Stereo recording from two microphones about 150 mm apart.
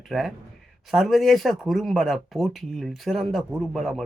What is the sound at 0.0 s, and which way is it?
Speech, centre (ahead or behind).